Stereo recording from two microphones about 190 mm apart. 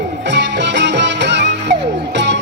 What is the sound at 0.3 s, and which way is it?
Music, 70° right (ahead or behind).